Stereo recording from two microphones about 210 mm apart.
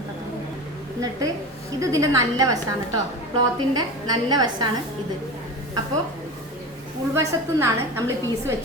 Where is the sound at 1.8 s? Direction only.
15° right (ahead or behind).